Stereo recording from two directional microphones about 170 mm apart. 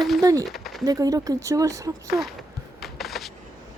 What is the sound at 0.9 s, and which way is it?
Speech, 20° right (ahead or behind).